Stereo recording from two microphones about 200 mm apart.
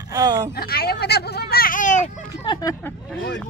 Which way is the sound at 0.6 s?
50° left (ahead or behind).